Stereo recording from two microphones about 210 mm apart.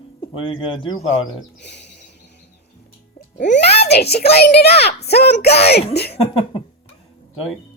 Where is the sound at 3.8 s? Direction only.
50° left (ahead or behind).